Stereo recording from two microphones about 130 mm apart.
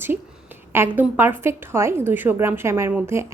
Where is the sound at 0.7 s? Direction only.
15° right (ahead or behind).